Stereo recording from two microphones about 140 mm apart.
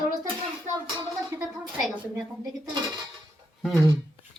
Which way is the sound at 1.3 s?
20° right (ahead or behind).